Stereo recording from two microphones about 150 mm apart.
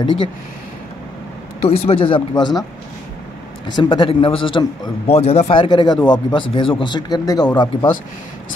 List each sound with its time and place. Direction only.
1.7 s speech: 40° left (ahead or behind)
3.6 s speech: 30° left (ahead or behind)
5.1 s speech: 45° left (ahead or behind)